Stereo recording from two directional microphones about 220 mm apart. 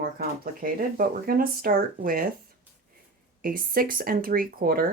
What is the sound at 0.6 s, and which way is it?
Speech, 40° right (ahead or behind).